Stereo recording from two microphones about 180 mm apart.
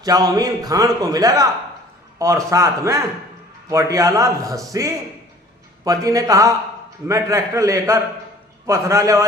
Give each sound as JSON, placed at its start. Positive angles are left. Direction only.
{"t": 0.0, "sound": "a man's voice", "side_deg": -20}